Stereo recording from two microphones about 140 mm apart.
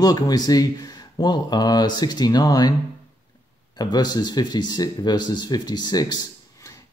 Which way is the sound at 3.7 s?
30° left (ahead or behind).